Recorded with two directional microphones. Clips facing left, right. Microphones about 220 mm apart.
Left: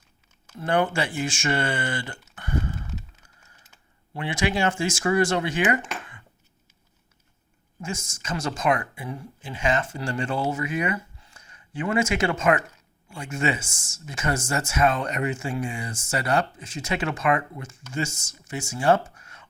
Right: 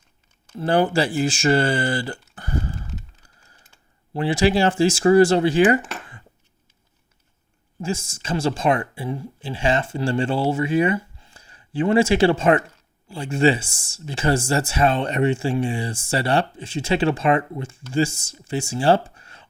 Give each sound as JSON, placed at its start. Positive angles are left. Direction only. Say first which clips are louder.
{"t": 0.5, "sound": "speech", "louder": "right 5 dB", "side_deg": -30}
{"t": 4.1, "sound": "speech", "louder": "right 7 dB", "side_deg": -35}
{"t": 7.8, "sound": "speech", "louder": "right 7 dB", "side_deg": -30}